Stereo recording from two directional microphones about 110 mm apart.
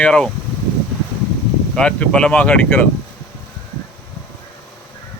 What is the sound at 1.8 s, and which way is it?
Speech, 10° left (ahead or behind).